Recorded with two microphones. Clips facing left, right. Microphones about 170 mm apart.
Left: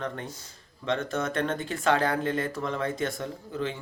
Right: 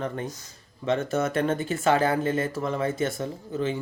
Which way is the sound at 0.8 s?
5° right (ahead or behind).